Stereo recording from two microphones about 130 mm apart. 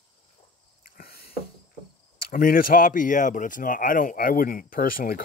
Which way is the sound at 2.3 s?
90° left.